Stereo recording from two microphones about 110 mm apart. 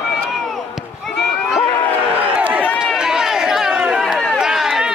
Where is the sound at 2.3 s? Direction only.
10° right (ahead or behind).